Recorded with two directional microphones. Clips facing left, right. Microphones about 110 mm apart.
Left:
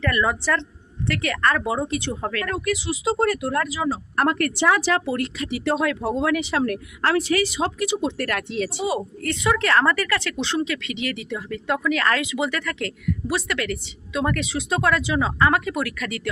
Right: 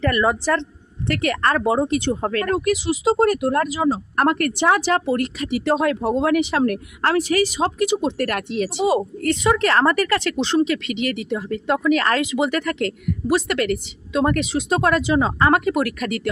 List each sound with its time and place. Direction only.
0.0 s speech: 35° right (ahead or behind)
11.0 s speech: 45° right (ahead or behind)